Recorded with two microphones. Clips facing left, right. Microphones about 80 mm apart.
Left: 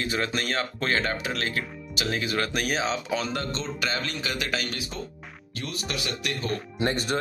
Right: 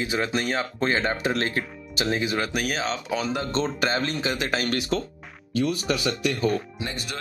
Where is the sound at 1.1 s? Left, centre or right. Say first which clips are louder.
Right 4 dB; right.